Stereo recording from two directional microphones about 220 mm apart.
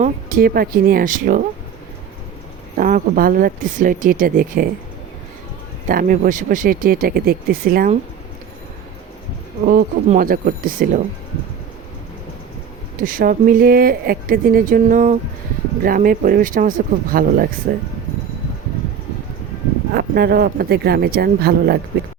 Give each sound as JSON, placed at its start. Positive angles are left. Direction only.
{"t": 0.0, "sound": "speech", "side_deg": -40}
{"t": 2.7, "sound": "speech", "side_deg": -40}
{"t": 5.9, "sound": "speech", "side_deg": -40}
{"t": 9.6, "sound": "speech", "side_deg": -40}
{"t": 13.0, "sound": "speech", "side_deg": -40}
{"t": 19.9, "sound": "speech", "side_deg": -45}